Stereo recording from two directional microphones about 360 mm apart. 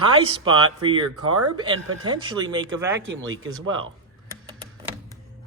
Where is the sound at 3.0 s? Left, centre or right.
Right.